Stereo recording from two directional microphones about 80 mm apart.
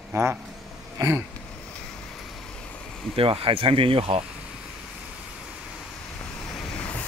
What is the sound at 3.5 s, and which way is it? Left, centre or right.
Speech, right.